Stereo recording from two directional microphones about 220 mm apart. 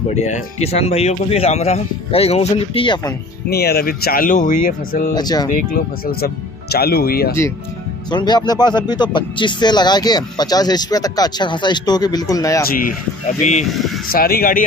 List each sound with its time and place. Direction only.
0.1 s speech: 30° left (ahead or behind)
3.4 s speech: 45° left (ahead or behind)
5.1 s speech: 20° left (ahead or behind)
5.5 s speech: 40° left (ahead or behind)
8.1 s speech: 20° left (ahead or behind)
12.6 s speech: 40° left (ahead or behind)
13.7 s speech: centre (ahead or behind)
14.1 s speech: 40° left (ahead or behind)